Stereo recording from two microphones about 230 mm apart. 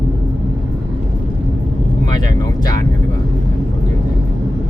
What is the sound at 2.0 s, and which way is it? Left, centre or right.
Vehicle, centre.